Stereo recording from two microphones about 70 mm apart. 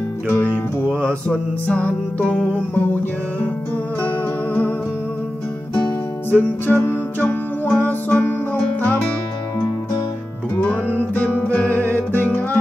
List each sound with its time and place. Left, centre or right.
1.0 s music: centre
6.3 s music: left
11.0 s music: left